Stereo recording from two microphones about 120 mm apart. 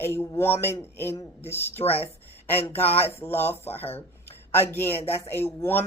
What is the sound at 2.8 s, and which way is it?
Speech, 55° left (ahead or behind).